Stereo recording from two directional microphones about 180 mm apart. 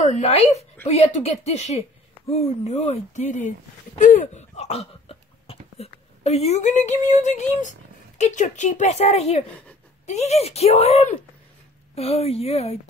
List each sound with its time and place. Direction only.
0.0 s speech: 40° left (ahead or behind)